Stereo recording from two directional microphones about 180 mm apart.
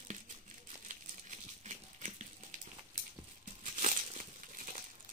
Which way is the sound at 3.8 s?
40° right (ahead or behind).